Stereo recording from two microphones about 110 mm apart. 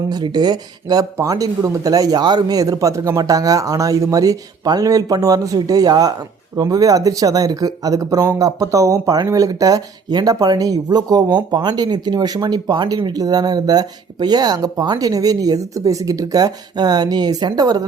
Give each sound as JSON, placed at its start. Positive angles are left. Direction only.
{"t": 0.1, "sound": "speech", "side_deg": -40}